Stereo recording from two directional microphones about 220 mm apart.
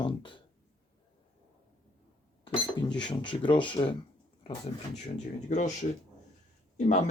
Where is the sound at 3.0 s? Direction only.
20° left (ahead or behind).